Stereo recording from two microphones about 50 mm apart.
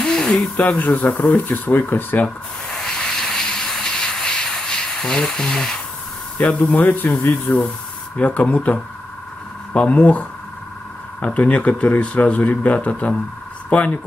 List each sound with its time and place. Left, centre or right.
0.0 s a sound: centre
0.6 s speech: left
2.7 s vehicle: centre
6.3 s speech: left
6.8 s speech: left
9.8 s speech: left